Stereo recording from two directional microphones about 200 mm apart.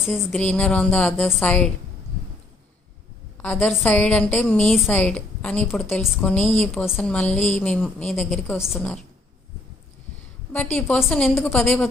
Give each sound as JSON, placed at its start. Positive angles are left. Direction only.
{"t": 0.1, "sound": "a woman's voice", "side_deg": 5}
{"t": 3.3, "sound": "a woman's voice", "side_deg": 5}
{"t": 10.8, "sound": "a woman's voice", "side_deg": 5}